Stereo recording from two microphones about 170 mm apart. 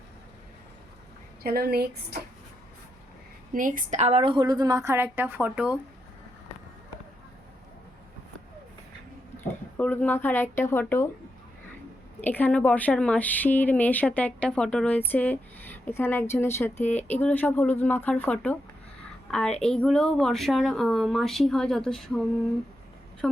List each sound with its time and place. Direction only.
1.4 s speech: 65° right (ahead or behind)
3.5 s a woman's voice: 50° right (ahead or behind); by 5.7 s 10° right (ahead or behind)
9.4 s speech: 10° left (ahead or behind)
12.2 s a woman's voice: 10° left (ahead or behind)